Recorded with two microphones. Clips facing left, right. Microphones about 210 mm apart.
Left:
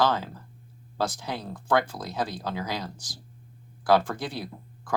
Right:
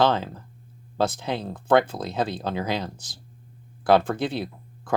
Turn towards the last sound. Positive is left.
turn(degrees=-25)  # may be behind; listen again after turning